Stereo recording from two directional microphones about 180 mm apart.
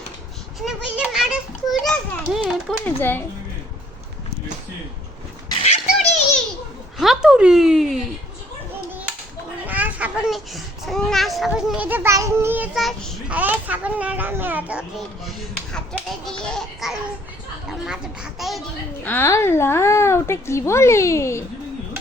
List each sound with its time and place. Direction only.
0.6 s a child's voice: 5° right (ahead or behind)
2.8 s speech: 10° left (ahead or behind)
5.6 s a sound: 40° left (ahead or behind)
7.0 s a child's voice: centre (ahead or behind)
9.6 s a child's voice: 10° right (ahead or behind)
19.0 s speech: 10° left (ahead or behind)